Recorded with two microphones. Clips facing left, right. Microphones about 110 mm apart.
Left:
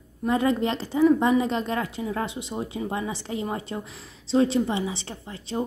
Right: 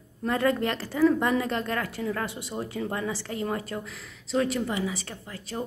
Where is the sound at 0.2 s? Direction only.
20° left (ahead or behind).